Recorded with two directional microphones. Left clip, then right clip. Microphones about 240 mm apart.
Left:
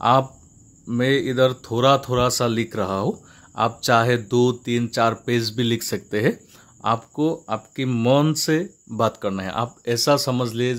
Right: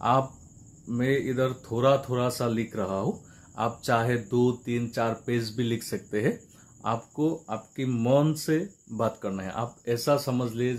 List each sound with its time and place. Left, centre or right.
0.8 s speech: left